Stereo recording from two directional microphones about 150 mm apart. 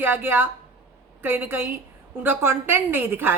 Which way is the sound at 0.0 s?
15° right (ahead or behind).